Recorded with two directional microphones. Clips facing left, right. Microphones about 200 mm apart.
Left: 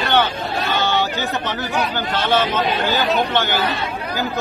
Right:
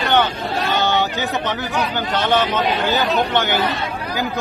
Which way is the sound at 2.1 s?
20° right (ahead or behind).